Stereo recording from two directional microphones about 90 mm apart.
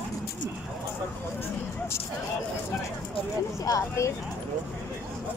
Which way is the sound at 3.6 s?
35° left (ahead or behind).